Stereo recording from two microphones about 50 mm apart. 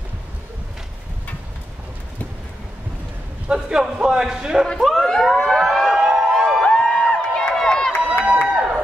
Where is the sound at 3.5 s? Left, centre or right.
Centre.